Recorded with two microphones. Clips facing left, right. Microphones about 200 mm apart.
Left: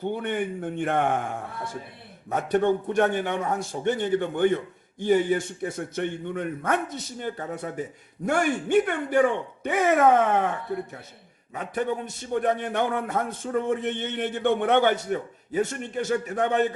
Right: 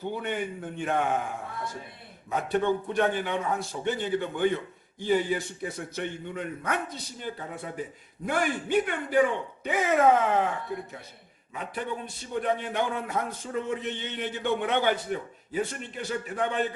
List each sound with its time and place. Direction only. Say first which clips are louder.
0.0 s a man's voice: left 4 dB; 55° left (ahead or behind)
2.3 s a man's voice: left 3 dB; 50° left (ahead or behind)
11.5 s a man's voice: left 6 dB; 45° left (ahead or behind)